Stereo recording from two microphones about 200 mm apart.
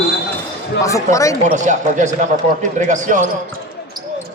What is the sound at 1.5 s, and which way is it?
Speech, 35° right (ahead or behind).